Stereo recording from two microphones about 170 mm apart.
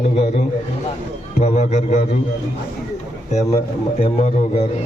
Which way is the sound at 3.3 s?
40° left (ahead or behind).